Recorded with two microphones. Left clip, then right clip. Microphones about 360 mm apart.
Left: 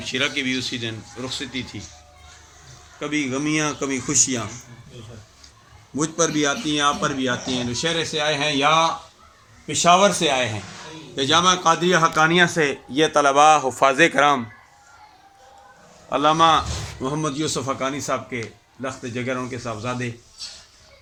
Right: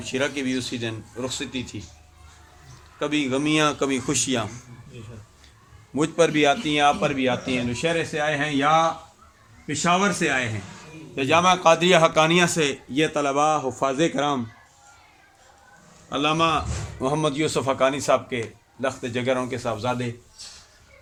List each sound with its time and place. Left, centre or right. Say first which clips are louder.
0.0 s speech: left 3 dB; right
3.0 s speech: right 1 dB; right
6.0 s speech: right 2 dB; right
7.0 s a man's voice: even; centre
9.8 s a man's voice: left 6 dB; centre
11.1 s a man's voice: left 1 dB; centre
12.9 s a man's voice: left 9 dB; centre
16.1 s a man's voice: left 5 dB; centre
17.3 s speech: right 2 dB; right